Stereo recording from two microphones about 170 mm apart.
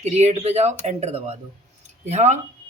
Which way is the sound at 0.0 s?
40° right (ahead or behind).